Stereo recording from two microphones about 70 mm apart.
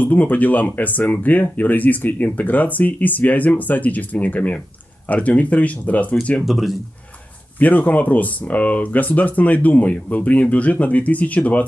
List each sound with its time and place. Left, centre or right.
0.0 s speech: left
6.4 s speech: centre
7.5 s speech: left